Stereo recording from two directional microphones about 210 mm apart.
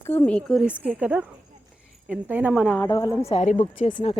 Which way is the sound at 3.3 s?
30° left (ahead or behind).